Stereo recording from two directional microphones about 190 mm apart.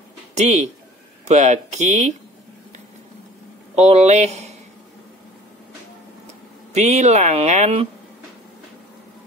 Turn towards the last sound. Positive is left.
turn(degrees=-35)  # may be behind; listen again after turning